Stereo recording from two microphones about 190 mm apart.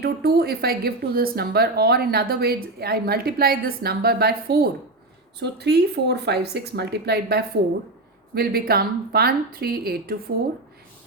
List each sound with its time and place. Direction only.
0.0 s speech: 55° right (ahead or behind)